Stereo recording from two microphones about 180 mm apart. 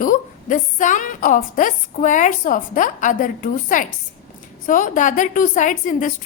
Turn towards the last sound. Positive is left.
turn(degrees=45)  # may be behind; listen again after turning